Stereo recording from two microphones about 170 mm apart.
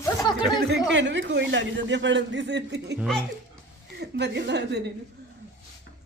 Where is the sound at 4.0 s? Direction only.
85° right.